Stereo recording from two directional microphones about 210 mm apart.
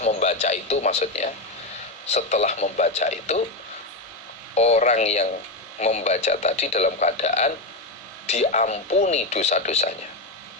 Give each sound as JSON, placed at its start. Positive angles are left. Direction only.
{"t": 0.0, "sound": "a man's voice", "side_deg": 35}
{"t": 4.5, "sound": "a man's voice", "side_deg": 35}